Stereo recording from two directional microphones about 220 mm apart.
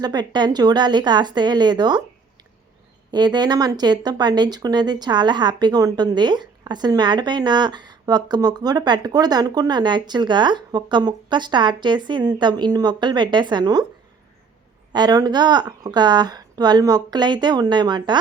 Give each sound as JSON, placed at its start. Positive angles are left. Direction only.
{"t": 0.0, "sound": "speech", "side_deg": -20}
{"t": 3.1, "sound": "speech", "side_deg": -20}
{"t": 14.9, "sound": "speech", "side_deg": -20}